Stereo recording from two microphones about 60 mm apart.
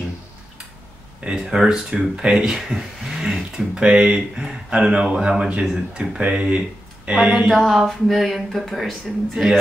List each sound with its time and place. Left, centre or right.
1.3 s speech: centre
7.5 s a sound: centre
9.3 s speech: centre